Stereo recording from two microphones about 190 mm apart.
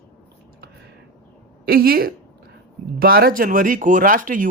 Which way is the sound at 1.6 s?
55° right (ahead or behind).